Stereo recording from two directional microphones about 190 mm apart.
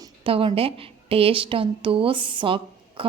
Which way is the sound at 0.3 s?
30° right (ahead or behind).